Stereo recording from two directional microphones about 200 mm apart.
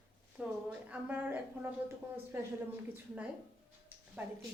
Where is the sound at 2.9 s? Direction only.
5° right (ahead or behind).